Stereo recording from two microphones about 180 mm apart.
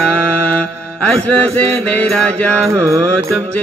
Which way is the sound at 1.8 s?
5° left (ahead or behind).